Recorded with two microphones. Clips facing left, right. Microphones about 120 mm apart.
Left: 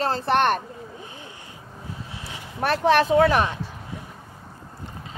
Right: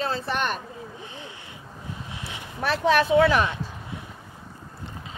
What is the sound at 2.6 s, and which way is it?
Speech, 50° left (ahead or behind).